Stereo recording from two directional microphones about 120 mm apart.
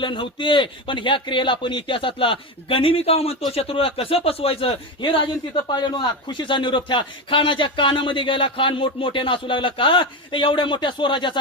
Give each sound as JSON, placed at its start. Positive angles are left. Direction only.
{"t": 0.0, "sound": "a man's voice", "side_deg": 40}
{"t": 4.9, "sound": "a man's voice", "side_deg": 40}